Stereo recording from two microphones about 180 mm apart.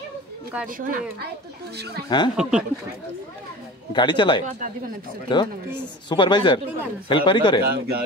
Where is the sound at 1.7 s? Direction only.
65° right (ahead or behind).